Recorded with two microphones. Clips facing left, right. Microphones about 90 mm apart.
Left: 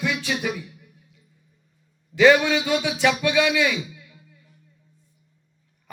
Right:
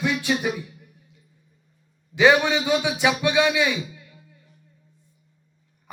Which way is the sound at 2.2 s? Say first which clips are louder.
Left 1 dB; 15° right (ahead or behind).